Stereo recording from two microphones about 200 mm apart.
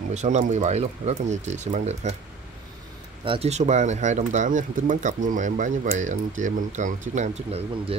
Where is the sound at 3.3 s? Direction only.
30° right (ahead or behind).